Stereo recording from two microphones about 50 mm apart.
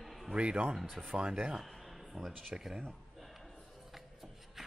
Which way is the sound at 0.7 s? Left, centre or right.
Centre.